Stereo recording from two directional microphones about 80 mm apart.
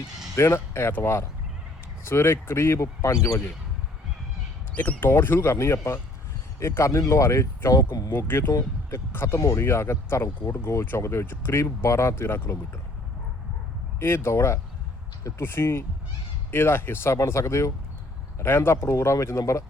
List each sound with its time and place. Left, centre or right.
0.3 s speech: left
4.8 s speech: left
14.0 s speech: left